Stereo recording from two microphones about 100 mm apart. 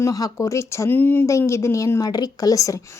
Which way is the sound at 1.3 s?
30° left (ahead or behind).